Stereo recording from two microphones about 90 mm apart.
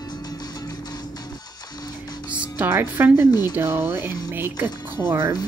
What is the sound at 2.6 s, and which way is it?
Speech, 20° right (ahead or behind).